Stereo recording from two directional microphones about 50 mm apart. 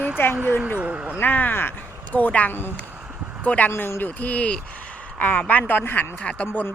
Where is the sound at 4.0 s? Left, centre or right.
Left.